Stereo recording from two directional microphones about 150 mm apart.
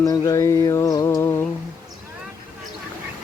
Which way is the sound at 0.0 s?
20° left (ahead or behind).